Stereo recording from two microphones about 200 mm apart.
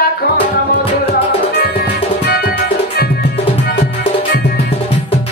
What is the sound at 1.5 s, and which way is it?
Music, 50° left (ahead or behind).